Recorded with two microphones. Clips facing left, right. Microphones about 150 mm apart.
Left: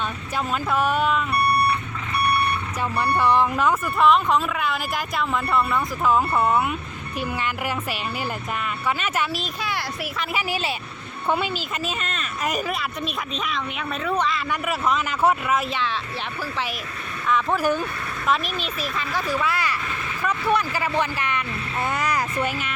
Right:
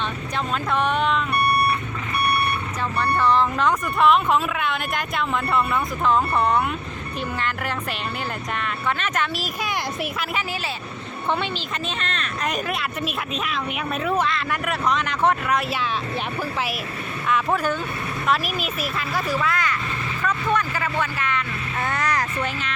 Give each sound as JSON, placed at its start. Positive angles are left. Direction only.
{"t": 0.3, "sound": "speech", "side_deg": 5}
{"t": 3.0, "sound": "a woman's voice", "side_deg": 15}
{"t": 9.6, "sound": "speech", "side_deg": -20}
{"t": 10.3, "sound": "a woman's voice", "side_deg": 15}
{"t": 17.2, "sound": "speech", "side_deg": 0}
{"t": 17.6, "sound": "a woman's voice", "side_deg": 10}
{"t": 18.3, "sound": "speech", "side_deg": -5}
{"t": 19.4, "sound": "a woman's voice", "side_deg": 5}
{"t": 20.2, "sound": "vehicle", "side_deg": 10}